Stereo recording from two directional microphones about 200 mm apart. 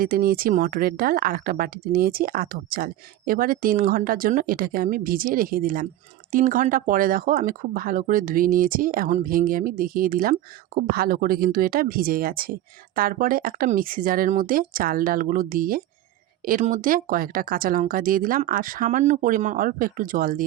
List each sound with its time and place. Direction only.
0.0 s speech: 45° right (ahead or behind)